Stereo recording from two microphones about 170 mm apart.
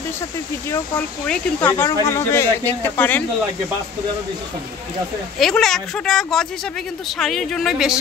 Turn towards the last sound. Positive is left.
turn(degrees=0)  # may be behind; listen again after turning